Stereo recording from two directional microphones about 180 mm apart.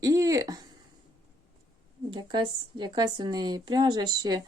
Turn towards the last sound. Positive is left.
turn(degrees=-20)  # may be behind; listen again after turning